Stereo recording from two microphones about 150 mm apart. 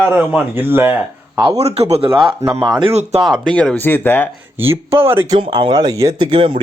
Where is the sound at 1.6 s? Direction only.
45° right (ahead or behind); by 2.9 s 25° right (ahead or behind).